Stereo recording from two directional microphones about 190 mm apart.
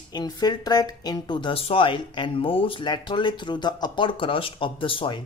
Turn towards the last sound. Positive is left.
turn(degrees=25)  # may be behind; listen again after turning